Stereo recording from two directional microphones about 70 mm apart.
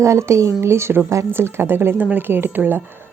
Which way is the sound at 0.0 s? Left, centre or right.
Right.